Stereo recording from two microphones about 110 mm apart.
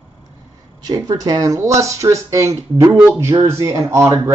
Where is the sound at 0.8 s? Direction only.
35° right (ahead or behind).